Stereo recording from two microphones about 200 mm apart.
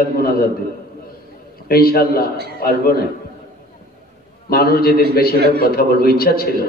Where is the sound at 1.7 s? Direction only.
50° left (ahead or behind).